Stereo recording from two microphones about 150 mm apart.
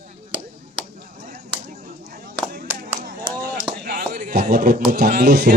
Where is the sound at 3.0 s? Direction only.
70° right (ahead or behind).